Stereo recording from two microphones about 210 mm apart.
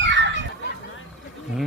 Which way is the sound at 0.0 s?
60° right (ahead or behind).